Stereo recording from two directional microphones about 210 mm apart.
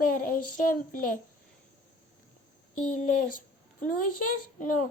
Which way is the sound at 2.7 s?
40° left (ahead or behind).